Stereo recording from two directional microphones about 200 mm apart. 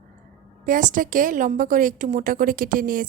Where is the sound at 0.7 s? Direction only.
40° right (ahead or behind).